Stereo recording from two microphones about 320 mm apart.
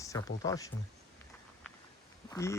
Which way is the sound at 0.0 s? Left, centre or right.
Centre.